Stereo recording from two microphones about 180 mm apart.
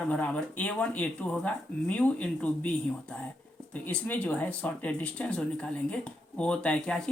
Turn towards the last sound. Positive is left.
turn(degrees=5)  # may be behind; listen again after turning